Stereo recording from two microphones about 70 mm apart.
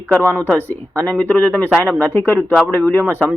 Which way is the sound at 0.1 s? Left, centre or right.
Centre.